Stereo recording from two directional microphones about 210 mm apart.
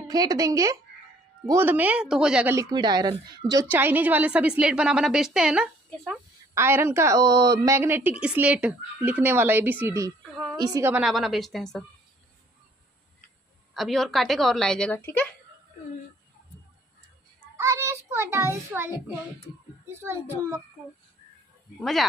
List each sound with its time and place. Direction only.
0.1 s a woman's voice: 15° right (ahead or behind)
3.6 s a woman's voice: 10° right (ahead or behind)
6.5 s a woman's voice: 10° right (ahead or behind)
13.7 s a woman's voice: centre (ahead or behind)
17.6 s a woman's voice: 15° right (ahead or behind)
19.9 s a woman's voice: 10° right (ahead or behind)
21.7 s a woman's voice: centre (ahead or behind)